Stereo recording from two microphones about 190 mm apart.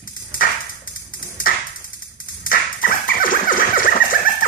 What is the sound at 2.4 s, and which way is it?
Dog, 45° left (ahead or behind).